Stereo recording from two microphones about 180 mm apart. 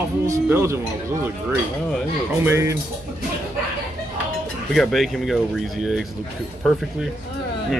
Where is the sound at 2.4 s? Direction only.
15° right (ahead or behind).